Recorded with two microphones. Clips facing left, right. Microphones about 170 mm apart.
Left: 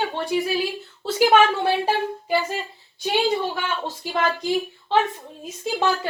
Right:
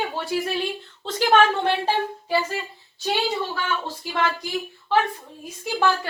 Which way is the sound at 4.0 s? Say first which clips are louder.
Left 4 dB; 20° left (ahead or behind).